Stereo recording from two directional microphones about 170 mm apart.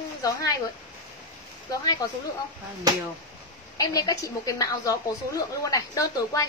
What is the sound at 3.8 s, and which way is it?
Speech, 20° left (ahead or behind).